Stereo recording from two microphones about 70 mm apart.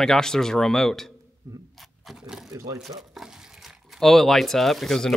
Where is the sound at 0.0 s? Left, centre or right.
Centre.